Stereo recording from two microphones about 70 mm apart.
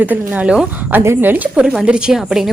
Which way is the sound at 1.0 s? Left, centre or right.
Right.